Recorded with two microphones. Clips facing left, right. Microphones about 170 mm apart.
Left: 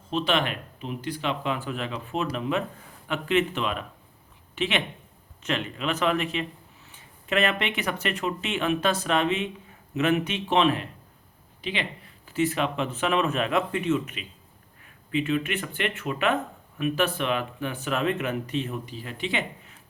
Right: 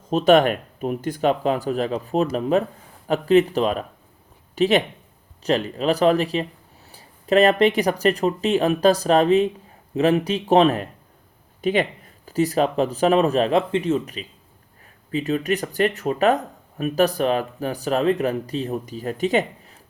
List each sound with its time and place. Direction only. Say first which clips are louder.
0.1 s speech: right 10 dB; 45° right (ahead or behind)